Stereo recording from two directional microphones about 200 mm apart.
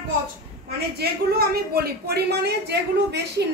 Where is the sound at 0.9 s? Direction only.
50° right (ahead or behind).